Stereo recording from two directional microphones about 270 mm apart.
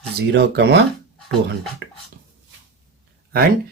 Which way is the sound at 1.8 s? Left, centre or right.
Right.